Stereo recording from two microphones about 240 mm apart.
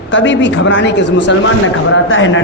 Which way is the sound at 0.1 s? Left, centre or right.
Left.